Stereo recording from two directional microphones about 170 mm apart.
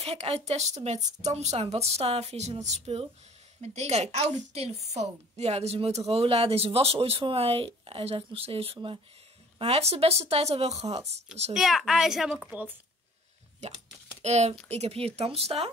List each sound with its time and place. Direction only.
0.0 s speech: 35° right (ahead or behind)
11.5 s a child's voice: centre (ahead or behind)
14.2 s speech: 40° right (ahead or behind)